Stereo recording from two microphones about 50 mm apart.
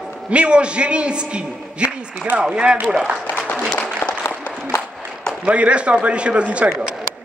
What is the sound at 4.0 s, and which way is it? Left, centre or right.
Applause, left.